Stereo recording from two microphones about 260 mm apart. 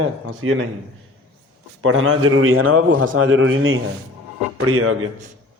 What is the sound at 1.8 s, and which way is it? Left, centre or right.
A man's voice, right.